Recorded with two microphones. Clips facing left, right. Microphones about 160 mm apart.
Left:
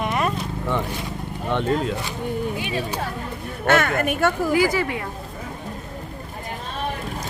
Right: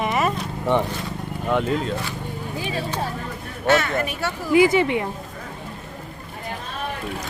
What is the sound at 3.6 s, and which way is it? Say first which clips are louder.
Speech: left 1 dB; 55° left (ahead or behind).